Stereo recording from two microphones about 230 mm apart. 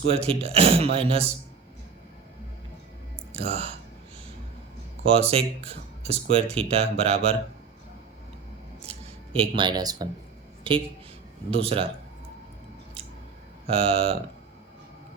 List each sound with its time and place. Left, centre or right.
0.0 s speech: right
3.3 s speech: right
5.3 s speech: right
8.9 s speech: right
10.6 s a sound: right
11.5 s speech: right
13.7 s speech: right